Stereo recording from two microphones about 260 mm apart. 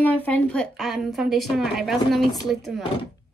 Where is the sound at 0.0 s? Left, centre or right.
Centre.